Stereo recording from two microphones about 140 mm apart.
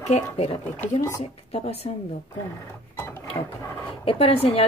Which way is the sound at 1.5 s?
45° left (ahead or behind).